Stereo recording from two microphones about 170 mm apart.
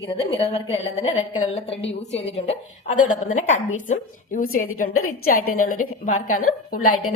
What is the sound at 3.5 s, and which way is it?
A woman's voice, 50° left (ahead or behind).